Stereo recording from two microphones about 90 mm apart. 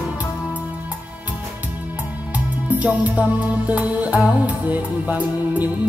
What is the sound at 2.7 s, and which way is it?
Music, 15° right (ahead or behind).